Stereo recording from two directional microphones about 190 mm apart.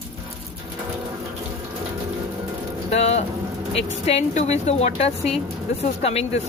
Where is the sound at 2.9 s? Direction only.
35° left (ahead or behind).